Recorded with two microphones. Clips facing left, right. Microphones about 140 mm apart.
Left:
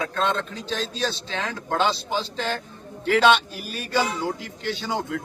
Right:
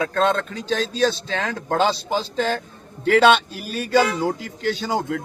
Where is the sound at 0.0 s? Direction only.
45° right (ahead or behind).